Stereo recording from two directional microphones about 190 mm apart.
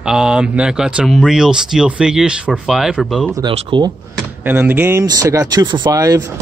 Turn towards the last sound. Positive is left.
turn(degrees=-20)  # may be behind; listen again after turning